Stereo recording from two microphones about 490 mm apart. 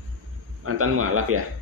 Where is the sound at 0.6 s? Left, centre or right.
Right.